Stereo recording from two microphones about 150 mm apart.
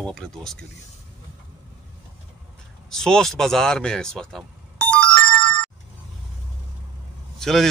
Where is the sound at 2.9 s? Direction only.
5° left (ahead or behind).